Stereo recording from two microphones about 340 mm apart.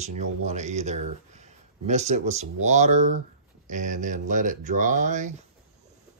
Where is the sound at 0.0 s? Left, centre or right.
Centre.